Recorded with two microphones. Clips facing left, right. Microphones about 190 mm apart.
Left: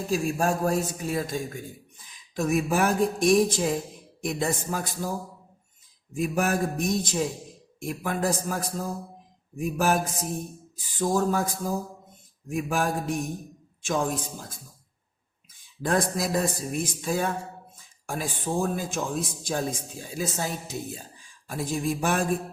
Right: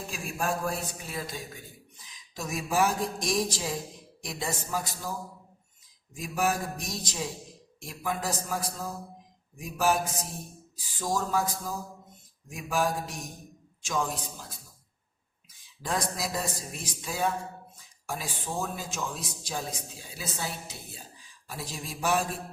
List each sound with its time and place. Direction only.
0.1 s a man's voice: 40° left (ahead or behind)
6.1 s a man's voice: 55° left (ahead or behind)
11.0 s a man's voice: 55° left (ahead or behind)
15.9 s a man's voice: 50° left (ahead or behind)